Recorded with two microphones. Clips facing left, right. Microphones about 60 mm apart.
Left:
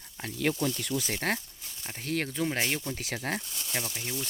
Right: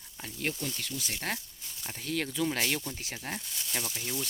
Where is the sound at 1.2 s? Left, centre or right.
Left.